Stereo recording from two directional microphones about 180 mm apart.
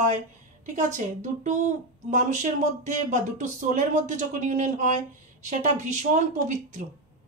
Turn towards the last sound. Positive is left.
turn(degrees=-45)  # may be behind; listen again after turning